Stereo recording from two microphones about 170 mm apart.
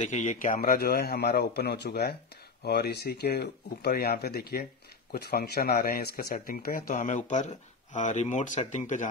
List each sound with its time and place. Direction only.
0.0 s a man's voice: 45° left (ahead or behind)